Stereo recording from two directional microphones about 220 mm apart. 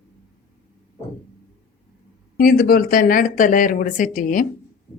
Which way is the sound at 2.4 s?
40° left (ahead or behind).